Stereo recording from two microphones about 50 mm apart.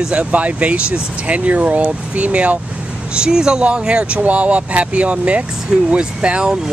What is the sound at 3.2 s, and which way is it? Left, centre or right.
Speech, centre.